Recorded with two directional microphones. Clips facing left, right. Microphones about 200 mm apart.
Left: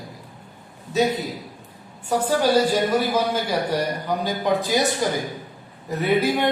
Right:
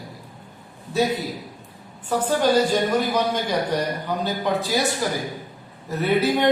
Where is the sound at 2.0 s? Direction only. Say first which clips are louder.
Even; 10° left (ahead or behind).